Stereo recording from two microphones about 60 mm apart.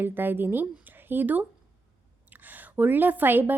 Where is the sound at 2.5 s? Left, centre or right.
Right.